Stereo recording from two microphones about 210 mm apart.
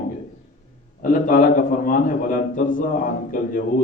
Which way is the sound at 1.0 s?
40° left (ahead or behind).